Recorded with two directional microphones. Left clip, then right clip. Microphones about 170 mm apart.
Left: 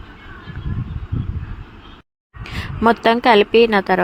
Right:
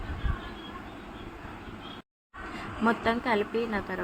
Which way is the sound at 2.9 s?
60° left (ahead or behind).